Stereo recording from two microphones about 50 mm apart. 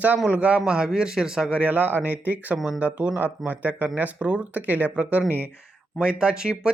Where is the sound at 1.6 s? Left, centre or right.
Right.